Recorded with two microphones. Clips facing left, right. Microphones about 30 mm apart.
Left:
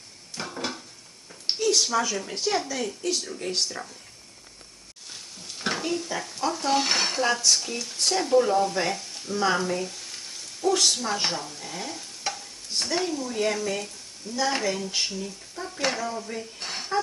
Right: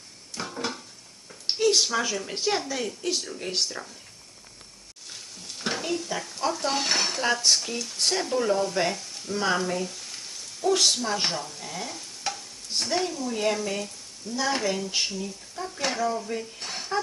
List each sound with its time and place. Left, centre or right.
0.3 s dishes: centre
1.5 s a sound: right
1.9 s a woman's voice: centre
2.6 s speech: centre
5.0 s a sound: centre
6.4 s dishes: centre
7.2 s speech: centre
8.3 s dishes: centre
8.8 s speech: centre
9.3 s sizzle: centre
10.8 s speech: centre
16.6 s dishes: centre